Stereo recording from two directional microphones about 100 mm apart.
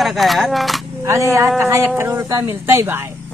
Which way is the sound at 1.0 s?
30° right (ahead or behind).